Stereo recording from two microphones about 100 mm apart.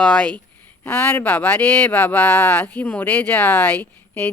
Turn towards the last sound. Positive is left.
turn(degrees=20)  # may be behind; listen again after turning